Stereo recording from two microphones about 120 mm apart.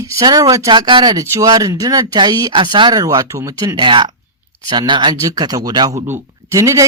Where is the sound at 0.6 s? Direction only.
40° right (ahead or behind).